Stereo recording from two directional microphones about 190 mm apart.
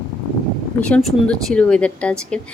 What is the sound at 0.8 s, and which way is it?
A woman's voice, 5° left (ahead or behind).